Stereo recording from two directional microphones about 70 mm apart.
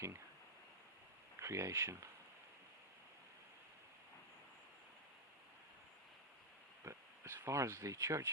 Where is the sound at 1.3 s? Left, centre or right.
Right.